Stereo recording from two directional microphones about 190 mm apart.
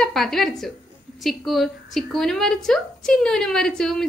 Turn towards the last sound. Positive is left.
turn(degrees=5)  # may be behind; listen again after turning